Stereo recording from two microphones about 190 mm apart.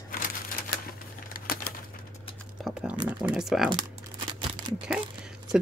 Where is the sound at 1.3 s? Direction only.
50° left (ahead or behind).